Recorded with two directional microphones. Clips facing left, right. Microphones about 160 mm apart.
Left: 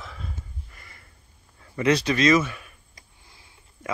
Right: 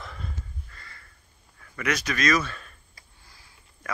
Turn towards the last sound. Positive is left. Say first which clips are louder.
# left 4 dB
turn(degrees=20)  # may be behind; listen again after turning